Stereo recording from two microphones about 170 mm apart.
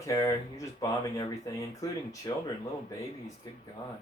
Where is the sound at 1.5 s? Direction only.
20° left (ahead or behind).